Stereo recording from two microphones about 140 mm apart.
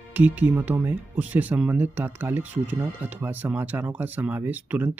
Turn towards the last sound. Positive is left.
turn(degrees=-15)  # may be behind; listen again after turning